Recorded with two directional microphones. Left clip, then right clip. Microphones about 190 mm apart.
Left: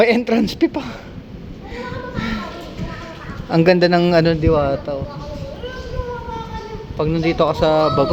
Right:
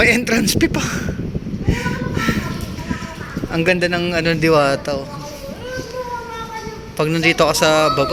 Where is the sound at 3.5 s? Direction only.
20° left (ahead or behind).